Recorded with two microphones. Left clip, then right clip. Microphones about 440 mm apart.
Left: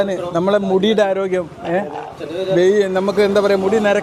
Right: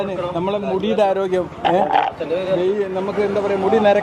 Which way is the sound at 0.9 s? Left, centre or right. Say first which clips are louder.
Left 1 dB; centre.